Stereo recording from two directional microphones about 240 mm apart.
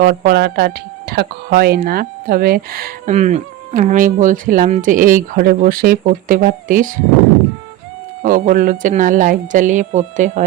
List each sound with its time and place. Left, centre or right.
0.0 s speech: right
8.2 s speech: right